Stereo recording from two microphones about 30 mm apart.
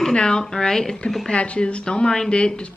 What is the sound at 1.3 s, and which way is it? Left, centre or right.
A woman's voice, left.